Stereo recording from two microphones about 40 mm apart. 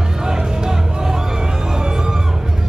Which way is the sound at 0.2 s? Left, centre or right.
Centre.